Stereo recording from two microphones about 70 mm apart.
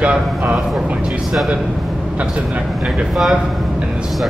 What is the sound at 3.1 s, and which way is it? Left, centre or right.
Speech, centre.